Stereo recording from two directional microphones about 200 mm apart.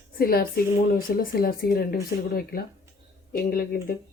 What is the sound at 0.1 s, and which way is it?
Speech, 50° left (ahead or behind).